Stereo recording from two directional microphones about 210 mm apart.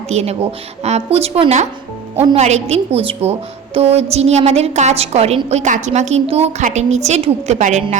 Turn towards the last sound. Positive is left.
turn(degrees=-35)  # may be behind; listen again after turning